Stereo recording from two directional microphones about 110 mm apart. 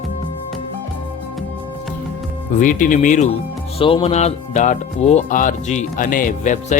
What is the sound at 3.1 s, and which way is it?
Speech, 70° left (ahead or behind).